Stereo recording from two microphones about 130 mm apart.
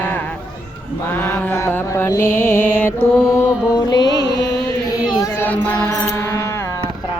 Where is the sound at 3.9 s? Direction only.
30° left (ahead or behind).